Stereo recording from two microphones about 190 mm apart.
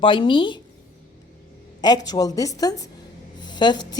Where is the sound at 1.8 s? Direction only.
20° left (ahead or behind).